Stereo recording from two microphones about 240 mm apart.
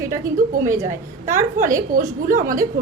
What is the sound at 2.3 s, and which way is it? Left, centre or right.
Speech, right.